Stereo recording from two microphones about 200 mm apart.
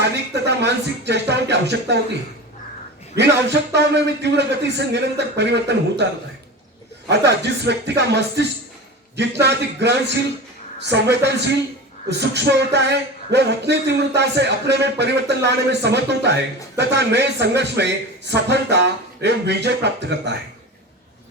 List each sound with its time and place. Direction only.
0.0 s music: 60° right (ahead or behind)
3.2 s music: 60° right (ahead or behind)
7.1 s music: 60° right (ahead or behind)